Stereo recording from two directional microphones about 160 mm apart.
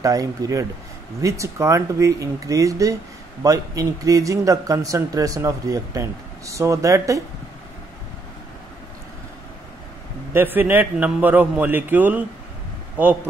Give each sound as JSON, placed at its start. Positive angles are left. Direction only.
{"t": 0.0, "sound": "speech", "side_deg": -20}
{"t": 10.3, "sound": "a man's voice", "side_deg": -10}